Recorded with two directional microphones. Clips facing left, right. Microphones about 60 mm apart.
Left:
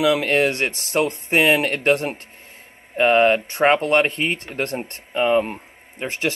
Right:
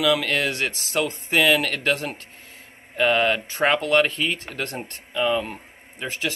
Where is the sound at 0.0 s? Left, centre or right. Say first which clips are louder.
Left 4 dB; left.